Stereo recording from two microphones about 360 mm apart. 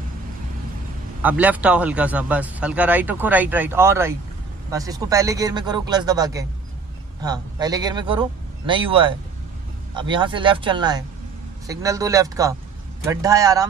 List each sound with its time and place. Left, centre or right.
1.2 s speech: centre